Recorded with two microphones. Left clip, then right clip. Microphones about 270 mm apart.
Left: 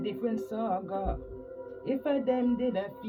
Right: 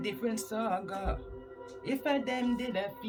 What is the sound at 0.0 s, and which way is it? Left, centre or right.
A man's voice, right.